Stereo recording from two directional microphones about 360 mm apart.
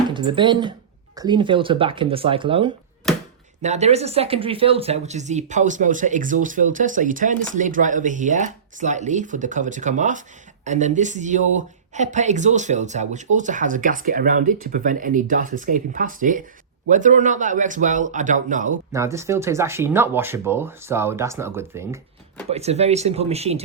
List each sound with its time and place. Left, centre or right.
0.1 s speech: centre
18.9 s speech: centre
22.4 s speech: centre